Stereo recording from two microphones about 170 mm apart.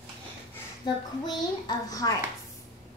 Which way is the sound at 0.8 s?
25° left (ahead or behind).